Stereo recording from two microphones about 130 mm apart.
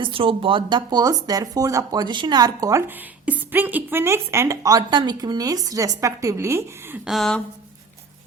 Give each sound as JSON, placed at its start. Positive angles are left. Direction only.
{"t": 0.0, "sound": "speech", "side_deg": -40}
{"t": 7.0, "sound": "speech", "side_deg": 0}